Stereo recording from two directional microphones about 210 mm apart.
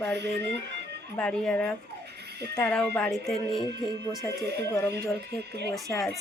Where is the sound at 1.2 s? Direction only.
5° left (ahead or behind).